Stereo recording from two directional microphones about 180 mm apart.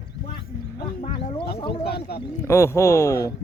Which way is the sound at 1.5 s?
30° left (ahead or behind).